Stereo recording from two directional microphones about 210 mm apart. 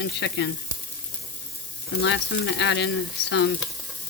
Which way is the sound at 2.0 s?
60° left (ahead or behind).